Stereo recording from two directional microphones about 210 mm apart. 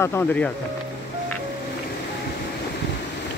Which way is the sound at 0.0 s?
15° left (ahead or behind).